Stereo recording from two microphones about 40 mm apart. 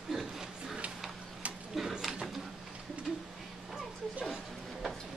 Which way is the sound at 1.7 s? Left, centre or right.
Centre.